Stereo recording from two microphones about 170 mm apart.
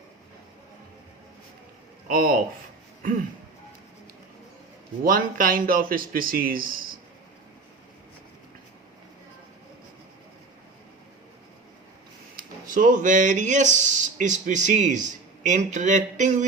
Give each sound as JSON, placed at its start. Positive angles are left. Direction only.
{"t": 2.0, "sound": "speech", "side_deg": -55}
{"t": 5.0, "sound": "speech", "side_deg": -55}
{"t": 12.4, "sound": "speech", "side_deg": -50}